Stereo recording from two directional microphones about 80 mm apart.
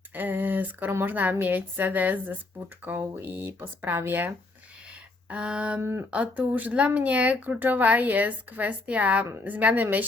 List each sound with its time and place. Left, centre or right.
0.1 s speech: right
4.9 s a sound: centre
5.8 s speech: right
6.1 s speech: centre